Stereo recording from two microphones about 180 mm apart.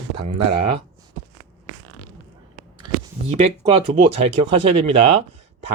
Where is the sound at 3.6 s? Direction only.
30° right (ahead or behind).